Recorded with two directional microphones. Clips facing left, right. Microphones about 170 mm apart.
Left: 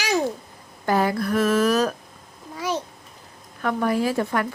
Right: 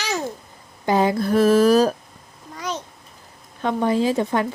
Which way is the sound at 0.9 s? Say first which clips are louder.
Right 3 dB; 20° right (ahead or behind).